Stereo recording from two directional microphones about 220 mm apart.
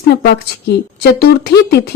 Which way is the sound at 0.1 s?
45° left (ahead or behind).